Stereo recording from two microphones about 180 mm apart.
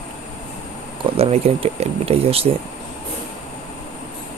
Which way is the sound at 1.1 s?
35° right (ahead or behind).